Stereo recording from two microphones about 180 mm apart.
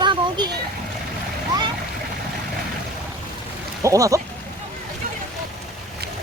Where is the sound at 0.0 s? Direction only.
25° right (ahead or behind).